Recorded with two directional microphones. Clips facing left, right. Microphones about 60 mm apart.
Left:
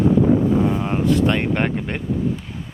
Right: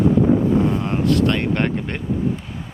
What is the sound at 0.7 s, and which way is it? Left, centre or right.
Speech, centre.